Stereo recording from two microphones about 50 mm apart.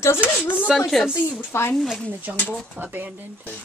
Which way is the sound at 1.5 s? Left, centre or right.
Left.